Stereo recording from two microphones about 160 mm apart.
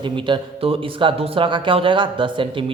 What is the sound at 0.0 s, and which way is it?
Speech, 35° right (ahead or behind).